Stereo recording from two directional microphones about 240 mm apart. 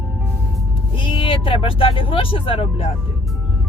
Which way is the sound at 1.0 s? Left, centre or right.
Left.